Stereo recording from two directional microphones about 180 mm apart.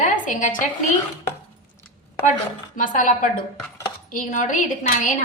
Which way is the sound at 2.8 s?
45° left (ahead or behind).